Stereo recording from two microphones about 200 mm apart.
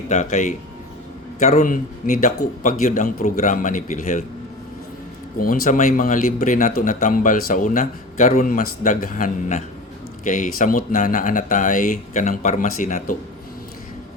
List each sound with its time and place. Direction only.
0.1 s speech: 35° left (ahead or behind)
5.4 s speech: 45° left (ahead or behind)